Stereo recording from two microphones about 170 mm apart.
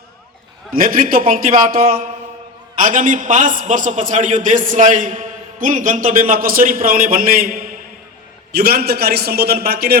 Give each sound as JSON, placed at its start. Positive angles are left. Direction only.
{"t": 0.7, "sound": "a man's voice", "side_deg": -55}
{"t": 8.5, "sound": "a man's voice", "side_deg": -65}